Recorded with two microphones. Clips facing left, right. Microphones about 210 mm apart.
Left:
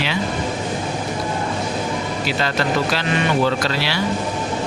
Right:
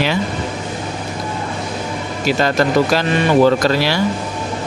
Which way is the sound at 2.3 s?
45° right (ahead or behind).